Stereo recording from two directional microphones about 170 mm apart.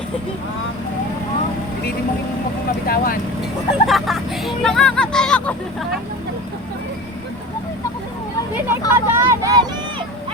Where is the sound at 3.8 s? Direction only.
Centre (ahead or behind).